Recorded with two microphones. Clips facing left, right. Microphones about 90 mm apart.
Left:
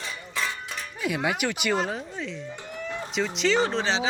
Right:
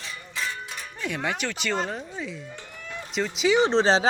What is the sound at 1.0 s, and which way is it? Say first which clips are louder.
Speech: left 2 dB; 5° left (ahead or behind).